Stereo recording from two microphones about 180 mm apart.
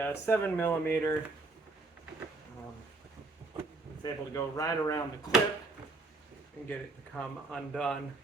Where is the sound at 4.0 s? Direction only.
15° left (ahead or behind).